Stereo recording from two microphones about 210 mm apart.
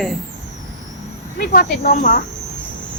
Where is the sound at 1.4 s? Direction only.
40° left (ahead or behind).